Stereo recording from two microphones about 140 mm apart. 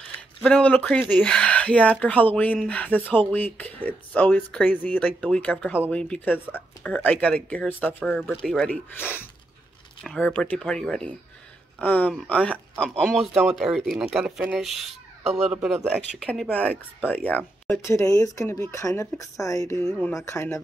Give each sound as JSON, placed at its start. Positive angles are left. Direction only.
{"t": 0.4, "sound": "speech", "side_deg": 10}
{"t": 19.8, "sound": "speech", "side_deg": 5}
{"t": 20.2, "sound": "speech", "side_deg": 20}